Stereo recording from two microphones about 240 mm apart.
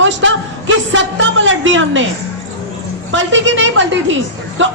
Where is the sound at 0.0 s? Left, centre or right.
Right.